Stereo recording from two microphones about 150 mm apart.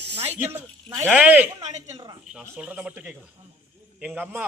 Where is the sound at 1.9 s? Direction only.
30° right (ahead or behind).